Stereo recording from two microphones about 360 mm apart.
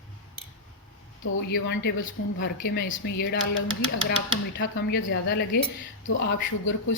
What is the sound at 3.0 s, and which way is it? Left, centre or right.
Speech, left.